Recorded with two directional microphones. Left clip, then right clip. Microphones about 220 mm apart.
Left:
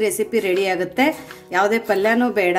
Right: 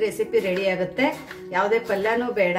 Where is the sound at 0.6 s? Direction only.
55° left (ahead or behind).